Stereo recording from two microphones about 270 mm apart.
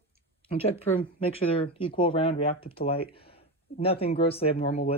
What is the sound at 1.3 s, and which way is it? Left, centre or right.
Speech, left.